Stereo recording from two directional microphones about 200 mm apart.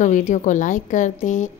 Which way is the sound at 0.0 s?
40° left (ahead or behind).